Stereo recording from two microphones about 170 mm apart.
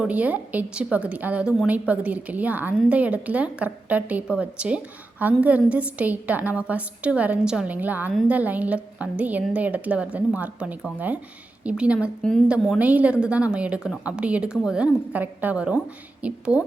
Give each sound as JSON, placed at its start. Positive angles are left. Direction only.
{"t": 0.0, "sound": "a woman's voice", "side_deg": -10}